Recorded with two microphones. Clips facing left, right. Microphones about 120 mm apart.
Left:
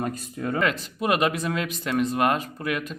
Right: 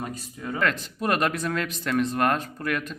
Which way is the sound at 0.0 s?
55° left (ahead or behind).